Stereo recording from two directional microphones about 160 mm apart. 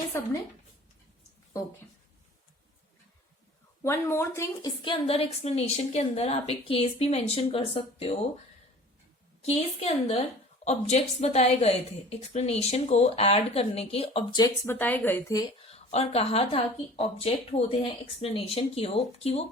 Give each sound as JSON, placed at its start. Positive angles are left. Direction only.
{"t": 0.1, "sound": "speech", "side_deg": 15}
{"t": 3.8, "sound": "speech", "side_deg": 15}
{"t": 4.8, "sound": "a woman's voice", "side_deg": 30}
{"t": 9.4, "sound": "a woman's voice", "side_deg": 40}
{"t": 15.6, "sound": "a woman's voice", "side_deg": 40}